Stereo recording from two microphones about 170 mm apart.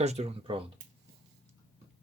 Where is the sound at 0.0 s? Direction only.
40° right (ahead or behind).